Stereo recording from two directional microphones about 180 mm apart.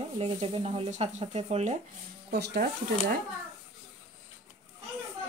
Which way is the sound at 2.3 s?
65° right (ahead or behind).